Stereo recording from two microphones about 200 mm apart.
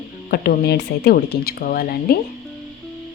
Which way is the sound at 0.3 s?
50° left (ahead or behind).